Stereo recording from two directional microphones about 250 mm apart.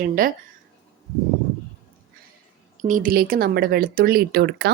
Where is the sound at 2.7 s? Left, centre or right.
Right.